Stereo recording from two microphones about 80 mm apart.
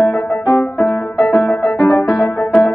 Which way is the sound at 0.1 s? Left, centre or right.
Centre.